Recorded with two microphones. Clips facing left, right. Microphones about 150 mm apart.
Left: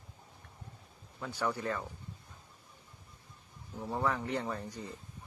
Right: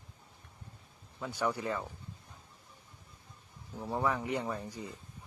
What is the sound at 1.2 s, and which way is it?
Speech, 10° right (ahead or behind).